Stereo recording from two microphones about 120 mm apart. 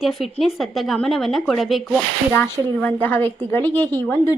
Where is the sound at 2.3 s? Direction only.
15° left (ahead or behind).